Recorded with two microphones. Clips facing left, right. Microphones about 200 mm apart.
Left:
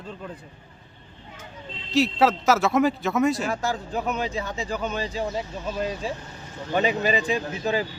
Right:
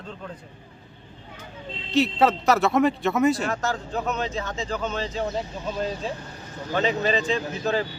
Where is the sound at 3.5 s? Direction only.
10° left (ahead or behind).